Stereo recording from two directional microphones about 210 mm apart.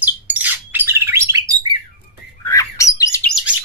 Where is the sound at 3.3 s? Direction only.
Centre (ahead or behind).